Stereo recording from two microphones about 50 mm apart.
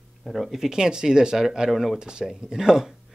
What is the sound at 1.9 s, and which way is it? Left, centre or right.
Speech, centre.